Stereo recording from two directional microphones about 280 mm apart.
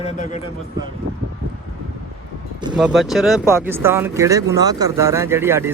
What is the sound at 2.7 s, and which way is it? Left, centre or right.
Speech, centre.